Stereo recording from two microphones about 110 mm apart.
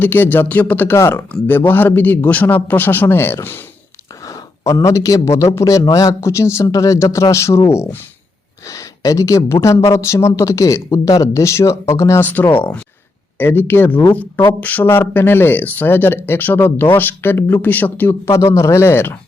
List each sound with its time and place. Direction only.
0.0 s a man's voice: 20° left (ahead or behind)
8.6 s a man's voice: 30° left (ahead or behind)